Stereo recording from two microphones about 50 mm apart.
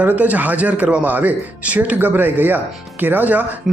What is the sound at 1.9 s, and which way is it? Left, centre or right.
Speech, right.